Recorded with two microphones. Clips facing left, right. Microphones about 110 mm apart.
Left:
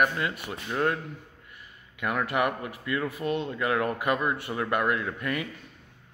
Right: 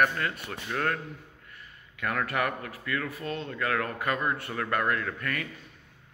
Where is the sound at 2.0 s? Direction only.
15° left (ahead or behind).